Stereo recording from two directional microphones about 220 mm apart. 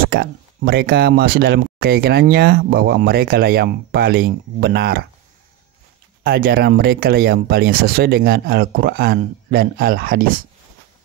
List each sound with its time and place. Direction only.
0.0 s speech: 40° right (ahead or behind)
6.2 s speech: 45° right (ahead or behind)